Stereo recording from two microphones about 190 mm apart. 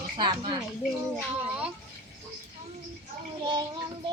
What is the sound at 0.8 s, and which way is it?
Speech, 5° right (ahead or behind).